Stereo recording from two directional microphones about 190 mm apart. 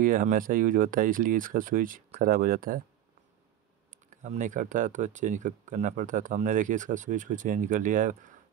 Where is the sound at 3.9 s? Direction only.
40° right (ahead or behind).